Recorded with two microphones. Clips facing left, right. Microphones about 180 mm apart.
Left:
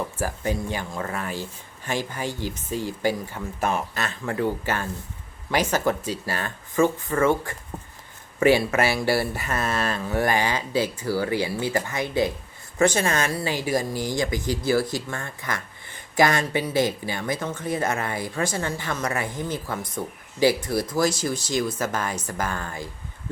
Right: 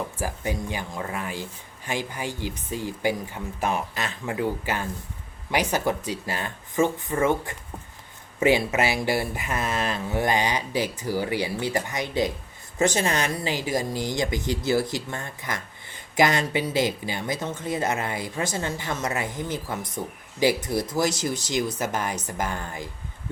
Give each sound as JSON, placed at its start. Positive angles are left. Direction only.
{"t": 0.2, "sound": "speech", "side_deg": -15}